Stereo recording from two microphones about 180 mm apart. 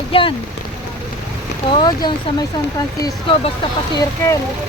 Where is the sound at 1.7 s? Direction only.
25° left (ahead or behind).